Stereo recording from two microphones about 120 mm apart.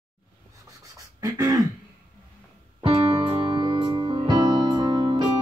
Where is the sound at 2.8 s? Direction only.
50° right (ahead or behind).